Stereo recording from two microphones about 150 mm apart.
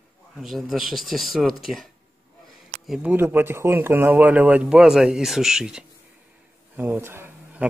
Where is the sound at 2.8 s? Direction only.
5° right (ahead or behind).